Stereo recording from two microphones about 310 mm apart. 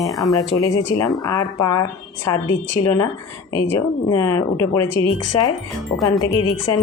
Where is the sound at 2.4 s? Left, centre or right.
Left.